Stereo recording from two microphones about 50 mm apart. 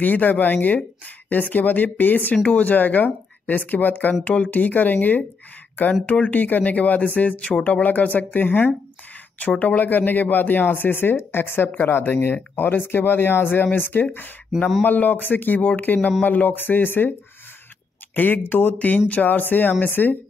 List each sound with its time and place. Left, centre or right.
0.0 s speech: left
9.6 s speech: left
18.1 s speech: left